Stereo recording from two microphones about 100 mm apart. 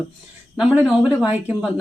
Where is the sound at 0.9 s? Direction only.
10° right (ahead or behind).